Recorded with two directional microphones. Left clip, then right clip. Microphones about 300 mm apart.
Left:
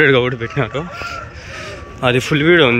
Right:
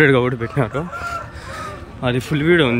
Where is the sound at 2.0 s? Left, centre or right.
Centre.